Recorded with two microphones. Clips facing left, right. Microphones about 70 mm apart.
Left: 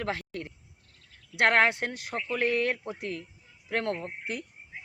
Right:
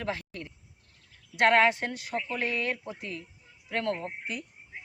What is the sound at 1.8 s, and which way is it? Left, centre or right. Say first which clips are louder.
Speech: even; left.